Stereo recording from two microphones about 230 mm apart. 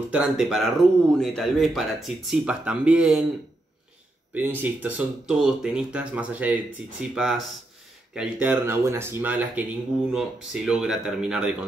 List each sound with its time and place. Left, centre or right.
0.1 s speech: centre
4.3 s speech: centre